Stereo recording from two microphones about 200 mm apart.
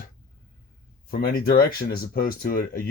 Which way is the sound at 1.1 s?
50° left (ahead or behind).